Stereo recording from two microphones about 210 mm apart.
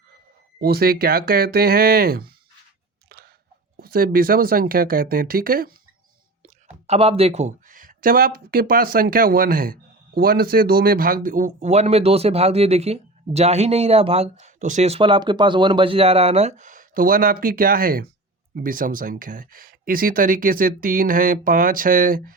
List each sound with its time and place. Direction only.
0.6 s speech: 45° right (ahead or behind)
3.8 s speech: 45° right (ahead or behind)
6.4 s speech: 30° right (ahead or behind)